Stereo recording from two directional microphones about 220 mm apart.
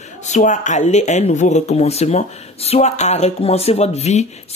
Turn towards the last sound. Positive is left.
turn(degrees=30)  # may be behind; listen again after turning